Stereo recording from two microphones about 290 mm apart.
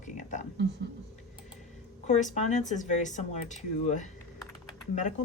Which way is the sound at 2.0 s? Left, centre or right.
Left.